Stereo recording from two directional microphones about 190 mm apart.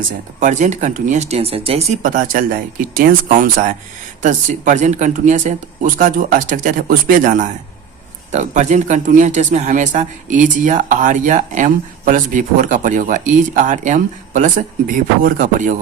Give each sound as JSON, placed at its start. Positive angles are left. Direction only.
{"t": 0.3, "sound": "speech", "side_deg": -40}
{"t": 2.0, "sound": "speech", "side_deg": -45}